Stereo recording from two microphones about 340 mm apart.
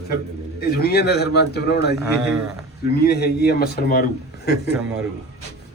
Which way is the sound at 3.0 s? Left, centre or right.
Left.